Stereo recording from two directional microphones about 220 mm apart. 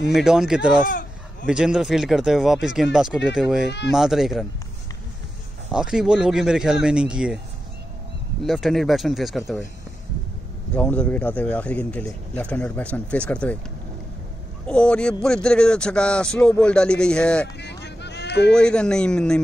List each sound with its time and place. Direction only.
0.2 s speech: centre (ahead or behind)
3.6 s speech: 50° left (ahead or behind)
3.9 s speech: centre (ahead or behind)
5.7 s speech: 5° right (ahead or behind)
8.5 s speech: centre (ahead or behind)
10.7 s speech: 5° left (ahead or behind)
14.7 s speech: 5° left (ahead or behind)
17.6 s a sound: 50° left (ahead or behind)
18.5 s speech: 5° left (ahead or behind)